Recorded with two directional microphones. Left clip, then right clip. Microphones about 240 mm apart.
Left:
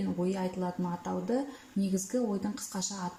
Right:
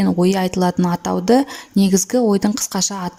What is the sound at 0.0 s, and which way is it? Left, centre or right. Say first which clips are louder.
A woman's voice: right 16 dB; right.